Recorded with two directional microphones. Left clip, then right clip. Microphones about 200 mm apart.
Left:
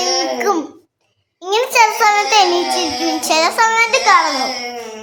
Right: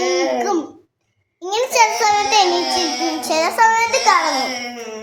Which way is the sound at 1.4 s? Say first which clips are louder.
Left 3 dB; 20° left (ahead or behind).